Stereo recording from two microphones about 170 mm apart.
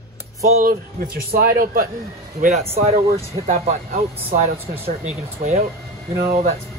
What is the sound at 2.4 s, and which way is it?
Speech, 40° right (ahead or behind).